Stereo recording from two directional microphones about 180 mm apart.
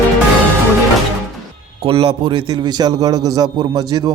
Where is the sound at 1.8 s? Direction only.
30° right (ahead or behind).